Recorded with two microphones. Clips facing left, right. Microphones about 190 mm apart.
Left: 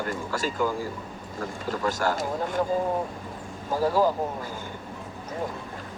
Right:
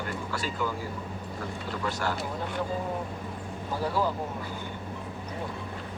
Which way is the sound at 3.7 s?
40° left (ahead or behind).